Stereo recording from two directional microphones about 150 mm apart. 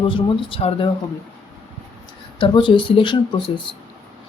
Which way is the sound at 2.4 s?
35° left (ahead or behind).